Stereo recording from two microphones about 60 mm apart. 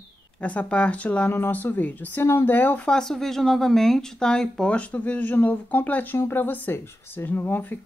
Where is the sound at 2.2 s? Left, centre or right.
Left.